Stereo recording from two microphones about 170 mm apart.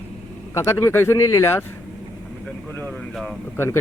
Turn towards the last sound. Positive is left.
turn(degrees=15)  # may be behind; listen again after turning